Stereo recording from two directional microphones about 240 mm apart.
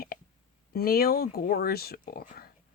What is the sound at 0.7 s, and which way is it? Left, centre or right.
Speech, left.